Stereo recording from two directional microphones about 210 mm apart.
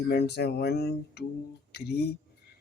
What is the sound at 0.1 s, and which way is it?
Speech, 50° left (ahead or behind).